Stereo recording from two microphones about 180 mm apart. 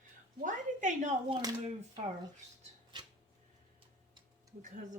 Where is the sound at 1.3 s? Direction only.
25° right (ahead or behind).